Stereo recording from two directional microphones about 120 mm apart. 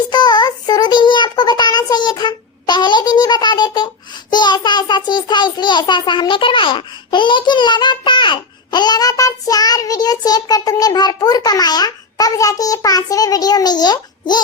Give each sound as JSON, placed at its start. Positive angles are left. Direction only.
{"t": 0.1, "sound": "child singing", "side_deg": 35}